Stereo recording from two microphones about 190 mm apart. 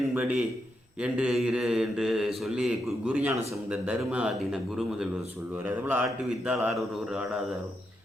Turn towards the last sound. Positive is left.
turn(degrees=0)  # may be behind; listen again after turning